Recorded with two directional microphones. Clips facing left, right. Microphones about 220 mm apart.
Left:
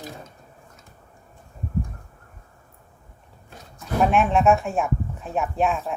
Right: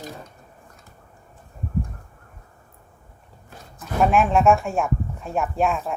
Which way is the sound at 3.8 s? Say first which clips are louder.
Right 1 dB; centre (ahead or behind).